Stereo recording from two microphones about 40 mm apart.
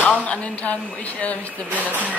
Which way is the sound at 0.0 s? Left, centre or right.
Left.